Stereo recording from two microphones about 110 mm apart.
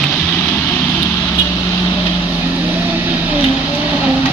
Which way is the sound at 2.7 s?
15° right (ahead or behind).